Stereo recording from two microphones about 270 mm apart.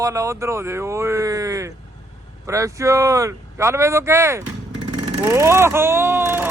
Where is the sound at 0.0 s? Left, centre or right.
Centre.